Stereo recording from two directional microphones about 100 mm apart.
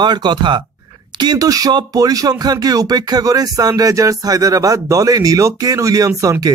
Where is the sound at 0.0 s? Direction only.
45° right (ahead or behind).